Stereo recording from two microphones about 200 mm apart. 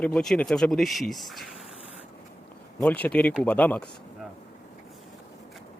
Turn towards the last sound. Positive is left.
turn(degrees=5)  # may be behind; listen again after turning